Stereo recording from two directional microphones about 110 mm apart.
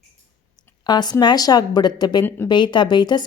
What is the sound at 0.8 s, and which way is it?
A woman's voice, 40° left (ahead or behind).